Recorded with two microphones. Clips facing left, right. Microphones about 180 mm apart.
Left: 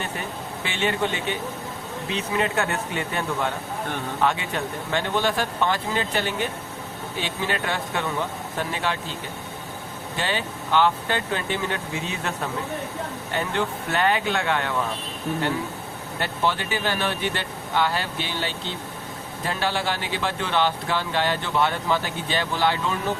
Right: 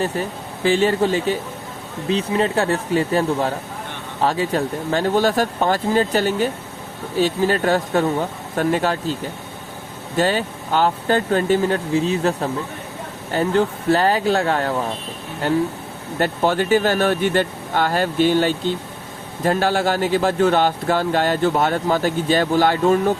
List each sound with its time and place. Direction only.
0.0 s a man's voice: 35° right (ahead or behind)
10.2 s speech: 40° right (ahead or behind)
16.1 s a man's voice: 45° right (ahead or behind)